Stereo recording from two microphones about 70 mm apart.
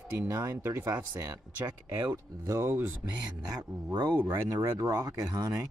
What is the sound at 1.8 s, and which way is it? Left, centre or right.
Speech, right.